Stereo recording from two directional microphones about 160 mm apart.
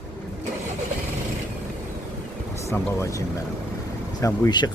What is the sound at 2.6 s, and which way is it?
Speech, 20° left (ahead or behind).